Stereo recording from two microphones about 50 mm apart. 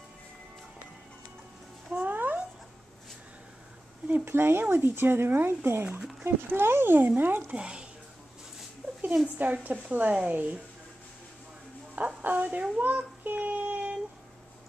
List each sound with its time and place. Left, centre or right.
1.9 s music: right
2.1 s dog: right
4.1 s speech: right
7.5 s speech: centre
9.4 s a woman's voice: right
12.2 s a woman's voice: right
12.8 s child singing: right